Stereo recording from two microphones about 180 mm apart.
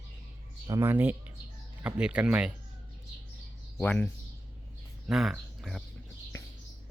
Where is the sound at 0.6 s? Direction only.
15° right (ahead or behind).